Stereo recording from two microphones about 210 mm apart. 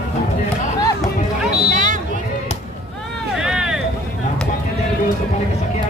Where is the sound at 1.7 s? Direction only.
35° right (ahead or behind).